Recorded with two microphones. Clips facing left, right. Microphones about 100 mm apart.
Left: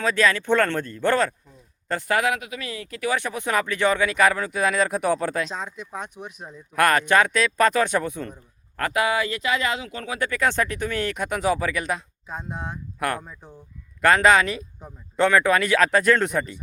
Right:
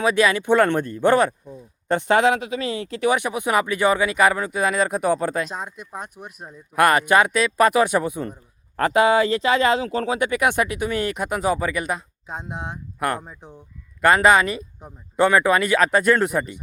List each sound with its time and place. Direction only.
0.0 s speech: 15° right (ahead or behind)
8.7 s speech: 30° right (ahead or behind)
10.2 s speech: 20° right (ahead or behind)
12.3 s speech: 20° right (ahead or behind)
14.0 s speech: 5° right (ahead or behind)